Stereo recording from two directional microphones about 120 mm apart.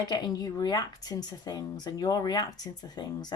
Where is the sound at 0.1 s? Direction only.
35° left (ahead or behind).